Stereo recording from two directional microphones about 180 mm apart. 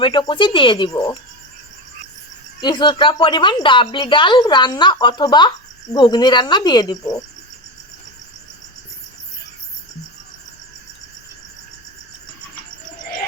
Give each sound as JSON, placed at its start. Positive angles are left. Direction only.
{"t": 0.0, "sound": "a woman's voice", "side_deg": 25}
{"t": 2.6, "sound": "a woman's voice", "side_deg": 25}